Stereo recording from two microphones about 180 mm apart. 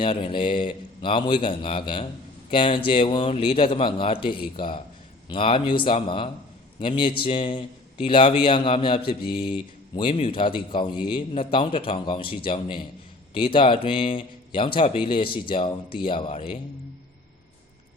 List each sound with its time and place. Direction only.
0.0 s a man's voice: 30° left (ahead or behind)